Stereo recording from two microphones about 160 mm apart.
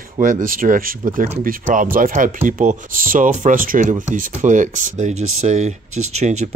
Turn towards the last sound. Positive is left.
turn(degrees=-45)  # may be behind; listen again after turning